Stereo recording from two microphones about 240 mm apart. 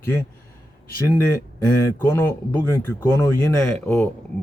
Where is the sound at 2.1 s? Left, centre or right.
Centre.